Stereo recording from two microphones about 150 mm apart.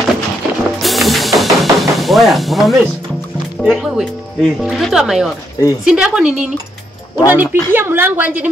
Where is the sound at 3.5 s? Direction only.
5° right (ahead or behind).